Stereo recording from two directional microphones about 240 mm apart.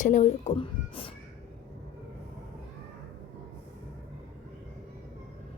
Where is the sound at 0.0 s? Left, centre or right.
Left.